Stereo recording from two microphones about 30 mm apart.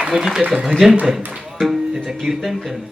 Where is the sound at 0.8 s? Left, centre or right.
Centre.